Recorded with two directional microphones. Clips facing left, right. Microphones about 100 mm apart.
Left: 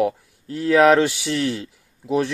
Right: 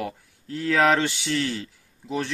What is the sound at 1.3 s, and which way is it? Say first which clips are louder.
Speech: left 3 dB; 20° left (ahead or behind).